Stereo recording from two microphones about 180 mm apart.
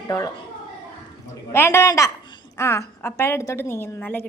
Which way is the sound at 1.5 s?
15° left (ahead or behind).